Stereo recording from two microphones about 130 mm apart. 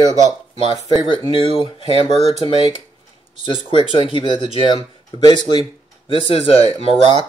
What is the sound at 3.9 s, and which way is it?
Speech, 40° left (ahead or behind).